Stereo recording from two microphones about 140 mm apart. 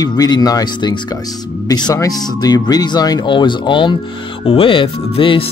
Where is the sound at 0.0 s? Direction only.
30° left (ahead or behind).